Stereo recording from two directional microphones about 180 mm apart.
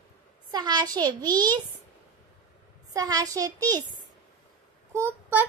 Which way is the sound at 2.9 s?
20° right (ahead or behind).